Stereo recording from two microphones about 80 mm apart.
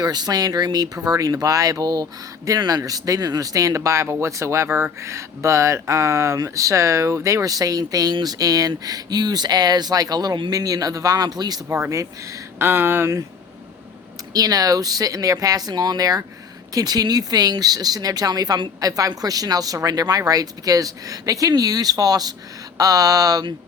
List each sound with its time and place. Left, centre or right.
0.0 s speech: right
11.7 s speech: right
14.3 s speech: right